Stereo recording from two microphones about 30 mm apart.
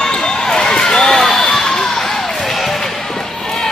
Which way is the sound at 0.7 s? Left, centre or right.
Left.